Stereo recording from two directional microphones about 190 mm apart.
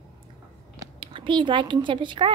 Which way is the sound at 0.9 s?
25° right (ahead or behind).